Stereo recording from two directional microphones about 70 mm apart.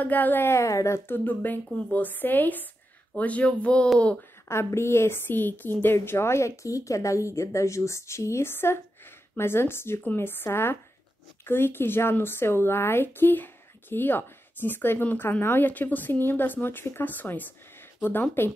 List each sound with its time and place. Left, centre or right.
0.0 s speech: left
0.5 s a woman's voice: left; by 3.9 s centre
4.5 s a woman's voice: left